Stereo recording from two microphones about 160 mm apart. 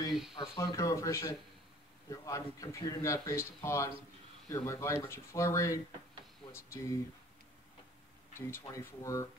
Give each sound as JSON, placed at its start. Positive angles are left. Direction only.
{"t": 0.1, "sound": "a sound", "side_deg": -5}
{"t": 0.4, "sound": "speech", "side_deg": 25}
{"t": 8.4, "sound": "speech", "side_deg": 15}